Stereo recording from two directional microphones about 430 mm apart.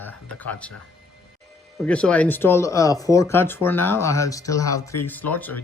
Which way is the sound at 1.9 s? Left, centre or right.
Centre.